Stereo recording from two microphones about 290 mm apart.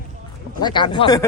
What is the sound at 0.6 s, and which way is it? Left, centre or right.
Speech, centre.